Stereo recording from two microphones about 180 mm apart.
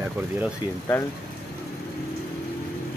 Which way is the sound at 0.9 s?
10° left (ahead or behind).